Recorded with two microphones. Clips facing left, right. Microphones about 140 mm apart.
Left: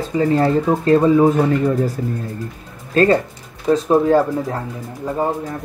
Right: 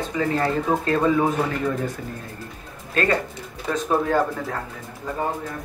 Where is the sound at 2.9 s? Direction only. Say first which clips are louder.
Left 8 dB; 30° left (ahead or behind).